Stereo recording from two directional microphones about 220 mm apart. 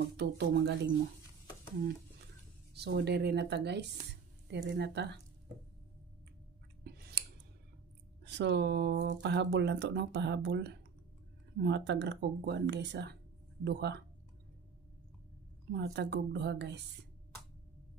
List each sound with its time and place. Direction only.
0.2 s speech: 50° right (ahead or behind)
2.7 s speech: 50° right (ahead or behind)
6.8 s a sound: 45° right (ahead or behind)
8.3 s speech: 50° right (ahead or behind)
15.7 s speech: 50° right (ahead or behind)